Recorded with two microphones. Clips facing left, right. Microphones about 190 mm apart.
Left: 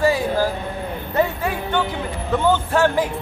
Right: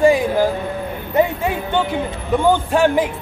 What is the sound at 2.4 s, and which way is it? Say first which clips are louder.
Speech: right 3 dB; 15° right (ahead or behind).